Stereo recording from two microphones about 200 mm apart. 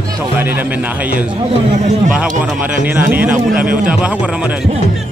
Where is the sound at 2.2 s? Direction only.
5° right (ahead or behind).